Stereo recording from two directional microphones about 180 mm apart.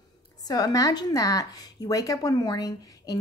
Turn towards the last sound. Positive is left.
turn(degrees=20)  # may be behind; listen again after turning